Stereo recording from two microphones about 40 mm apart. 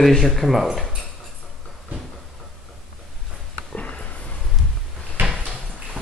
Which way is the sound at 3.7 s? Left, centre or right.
Left.